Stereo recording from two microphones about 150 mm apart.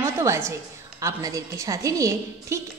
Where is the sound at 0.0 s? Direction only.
20° right (ahead or behind).